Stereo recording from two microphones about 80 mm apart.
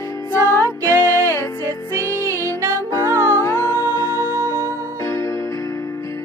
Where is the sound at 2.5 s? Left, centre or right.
Right.